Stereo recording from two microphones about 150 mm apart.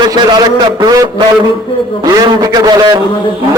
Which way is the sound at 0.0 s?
30° right (ahead or behind).